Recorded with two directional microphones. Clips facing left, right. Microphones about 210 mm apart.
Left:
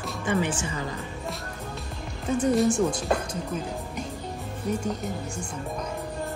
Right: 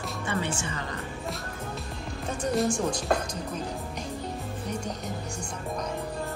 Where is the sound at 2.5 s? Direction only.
Centre (ahead or behind).